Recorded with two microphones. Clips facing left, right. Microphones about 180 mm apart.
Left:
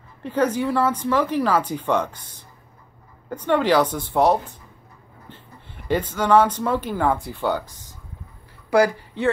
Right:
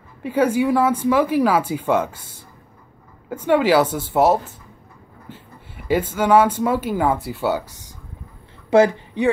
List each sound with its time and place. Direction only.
0.2 s speech: 10° right (ahead or behind)
5.9 s speech: 10° right (ahead or behind)
8.6 s a woman's voice: 25° right (ahead or behind)